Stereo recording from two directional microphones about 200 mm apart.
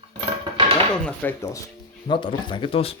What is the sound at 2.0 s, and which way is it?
Speech, 25° left (ahead or behind).